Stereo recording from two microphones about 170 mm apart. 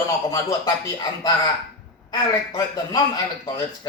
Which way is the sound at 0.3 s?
20° left (ahead or behind).